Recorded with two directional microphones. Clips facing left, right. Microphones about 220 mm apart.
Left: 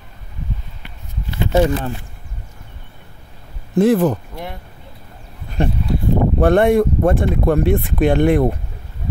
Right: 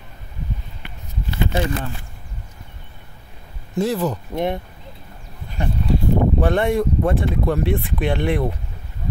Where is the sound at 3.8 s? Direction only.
55° left (ahead or behind).